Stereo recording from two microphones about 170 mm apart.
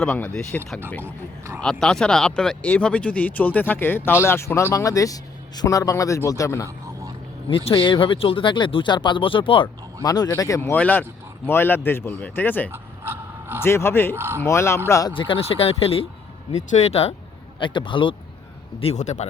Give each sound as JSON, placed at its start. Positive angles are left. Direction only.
{"t": 0.0, "sound": "speech", "side_deg": 5}
{"t": 7.5, "sound": "speech", "side_deg": 30}
{"t": 12.7, "sound": "dog", "side_deg": -15}
{"t": 13.6, "sound": "speech", "side_deg": 15}
{"t": 14.2, "sound": "speech", "side_deg": -15}
{"t": 14.4, "sound": "speech", "side_deg": 15}
{"t": 15.1, "sound": "speech", "side_deg": 30}
{"t": 18.8, "sound": "speech", "side_deg": 40}